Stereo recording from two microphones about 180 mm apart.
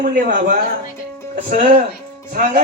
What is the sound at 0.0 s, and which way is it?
A man's voice, 50° right (ahead or behind).